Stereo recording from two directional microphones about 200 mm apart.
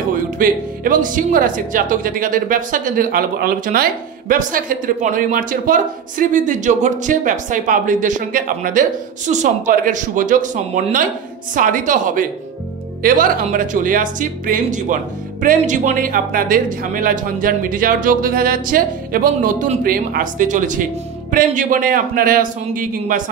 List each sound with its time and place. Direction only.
0.4 s speech: 40° right (ahead or behind)